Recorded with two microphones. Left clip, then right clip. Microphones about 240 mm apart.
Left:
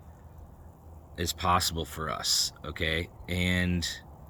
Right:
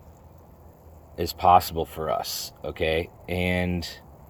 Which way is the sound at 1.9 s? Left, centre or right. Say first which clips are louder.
Right 3 dB; left.